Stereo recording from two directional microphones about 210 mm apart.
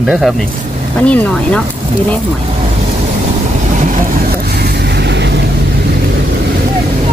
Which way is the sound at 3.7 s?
40° right (ahead or behind).